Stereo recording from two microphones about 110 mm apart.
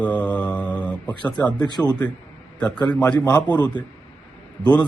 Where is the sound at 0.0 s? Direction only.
15° left (ahead or behind).